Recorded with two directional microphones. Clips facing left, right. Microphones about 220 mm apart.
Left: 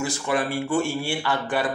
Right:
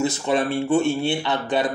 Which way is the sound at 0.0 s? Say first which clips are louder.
Right 4 dB; 25° right (ahead or behind).